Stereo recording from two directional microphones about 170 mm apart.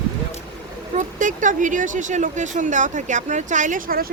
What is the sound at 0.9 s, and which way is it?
Speech, 50° right (ahead or behind).